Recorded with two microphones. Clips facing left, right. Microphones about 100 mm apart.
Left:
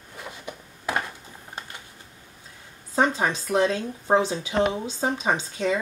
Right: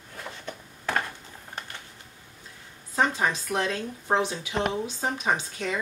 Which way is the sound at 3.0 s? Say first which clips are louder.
Left 2 dB; 25° left (ahead or behind).